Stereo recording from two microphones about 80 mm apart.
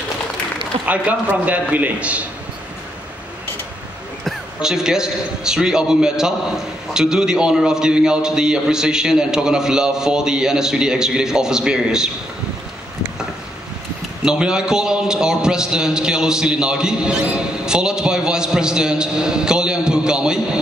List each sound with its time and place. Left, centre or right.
0.8 s a man's voice: centre
4.6 s a man's voice: centre
14.2 s a man's voice: centre